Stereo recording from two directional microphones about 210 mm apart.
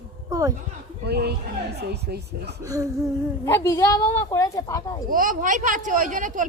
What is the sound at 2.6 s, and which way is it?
Speech, 15° right (ahead or behind).